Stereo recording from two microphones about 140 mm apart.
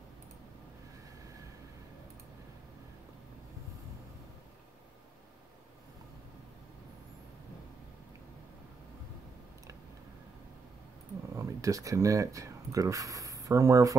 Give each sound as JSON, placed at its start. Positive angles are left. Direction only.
{"t": 11.3, "sound": "speech", "side_deg": -25}